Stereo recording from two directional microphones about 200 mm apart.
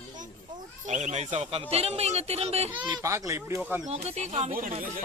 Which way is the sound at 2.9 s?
15° right (ahead or behind).